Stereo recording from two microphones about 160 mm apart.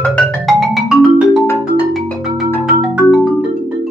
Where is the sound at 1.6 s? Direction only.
Centre (ahead or behind).